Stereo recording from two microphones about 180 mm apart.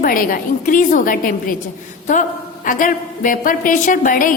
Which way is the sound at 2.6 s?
50° left (ahead or behind).